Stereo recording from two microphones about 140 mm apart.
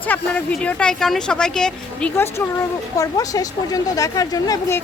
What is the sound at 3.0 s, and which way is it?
Speech, 25° left (ahead or behind).